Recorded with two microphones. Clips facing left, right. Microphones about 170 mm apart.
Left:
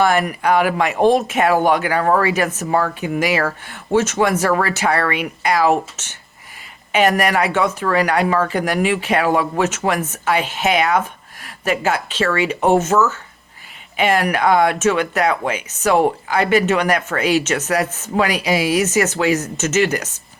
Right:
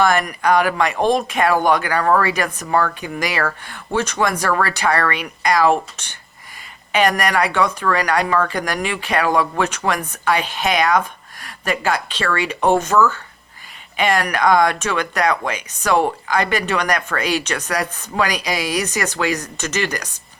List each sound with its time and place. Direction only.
0.0 s speech: 10° left (ahead or behind)
13.9 s speech: 10° left (ahead or behind)